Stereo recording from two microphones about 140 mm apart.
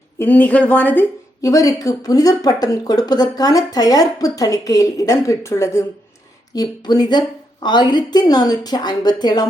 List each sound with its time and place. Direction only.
0.2 s a woman's voice: 10° left (ahead or behind)
1.4 s speech: 25° left (ahead or behind)